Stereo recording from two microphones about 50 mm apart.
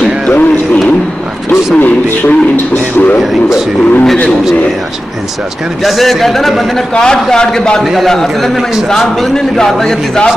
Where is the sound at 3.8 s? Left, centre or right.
Left.